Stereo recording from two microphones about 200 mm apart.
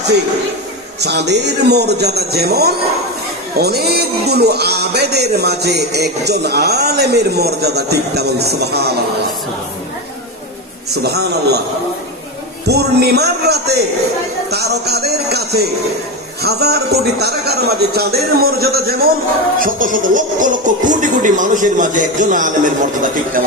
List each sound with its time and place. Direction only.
1.0 s a man's voice: 55° right (ahead or behind)
10.9 s speech: 55° right (ahead or behind)
12.6 s a man's voice: 55° right (ahead or behind)